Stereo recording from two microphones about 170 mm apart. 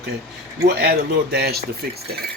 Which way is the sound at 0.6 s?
65° right (ahead or behind).